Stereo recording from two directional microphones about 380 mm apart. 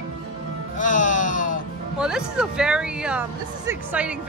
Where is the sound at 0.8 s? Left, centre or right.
Centre.